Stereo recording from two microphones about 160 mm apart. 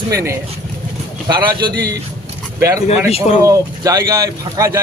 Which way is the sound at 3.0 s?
40° left (ahead or behind).